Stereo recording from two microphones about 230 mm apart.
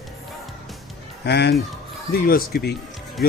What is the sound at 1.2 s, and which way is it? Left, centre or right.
Speech, left.